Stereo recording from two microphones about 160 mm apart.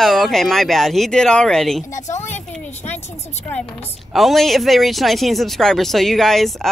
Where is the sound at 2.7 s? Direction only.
45° left (ahead or behind).